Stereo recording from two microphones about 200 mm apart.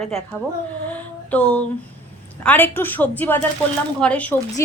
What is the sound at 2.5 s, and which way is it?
A woman's voice, 10° left (ahead or behind).